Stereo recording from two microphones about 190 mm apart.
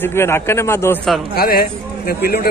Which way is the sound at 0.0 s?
15° left (ahead or behind).